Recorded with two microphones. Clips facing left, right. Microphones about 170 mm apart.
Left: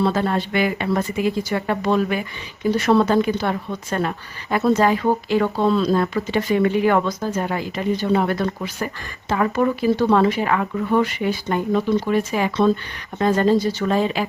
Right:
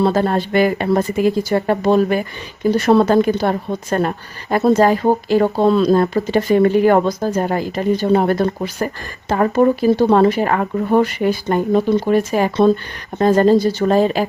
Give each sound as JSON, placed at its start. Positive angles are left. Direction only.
{"t": 0.0, "sound": "speech", "side_deg": -40}